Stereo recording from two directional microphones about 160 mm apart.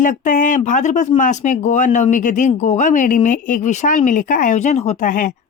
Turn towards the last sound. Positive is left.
turn(degrees=55)  # may be behind; listen again after turning